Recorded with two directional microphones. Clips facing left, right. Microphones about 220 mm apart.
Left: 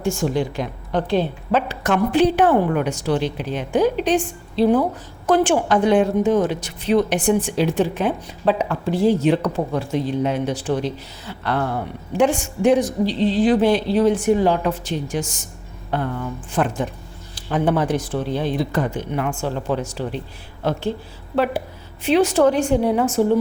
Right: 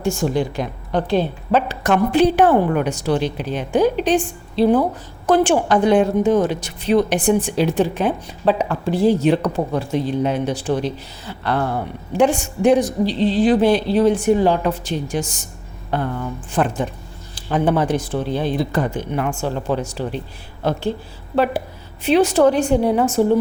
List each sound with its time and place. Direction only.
0.0 s a woman's voice: 40° right (ahead or behind)
21.3 s a woman's voice: 35° right (ahead or behind)